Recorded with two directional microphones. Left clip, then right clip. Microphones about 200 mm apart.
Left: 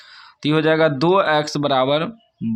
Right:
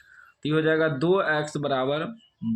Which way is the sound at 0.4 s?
40° left (ahead or behind).